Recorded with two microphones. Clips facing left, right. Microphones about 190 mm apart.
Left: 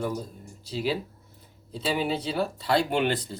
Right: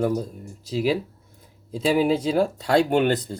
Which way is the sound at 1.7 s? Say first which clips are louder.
Right 7 dB; 45° right (ahead or behind).